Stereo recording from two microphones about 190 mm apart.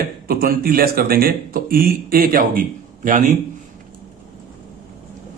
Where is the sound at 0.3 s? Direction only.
50° right (ahead or behind).